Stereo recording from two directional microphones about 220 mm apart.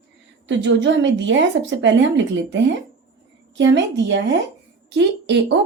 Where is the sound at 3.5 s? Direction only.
55° right (ahead or behind).